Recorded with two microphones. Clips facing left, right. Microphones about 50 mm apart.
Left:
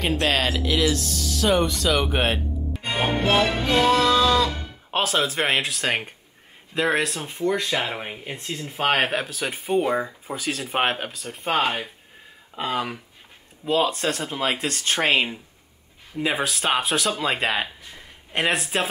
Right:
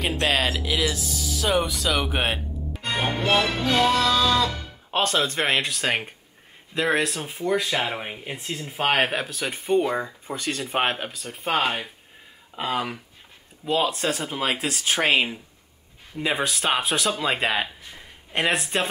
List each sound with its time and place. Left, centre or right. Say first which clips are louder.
0.0 s speech: left 1 dB; centre
2.8 s music: left 1 dB; left
3.2 s speech: left 2 dB; centre
3.4 s music: left 1 dB; centre
4.1 s speech: left 2 dB; centre